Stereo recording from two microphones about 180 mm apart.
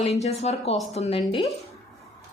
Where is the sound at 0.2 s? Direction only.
35° left (ahead or behind).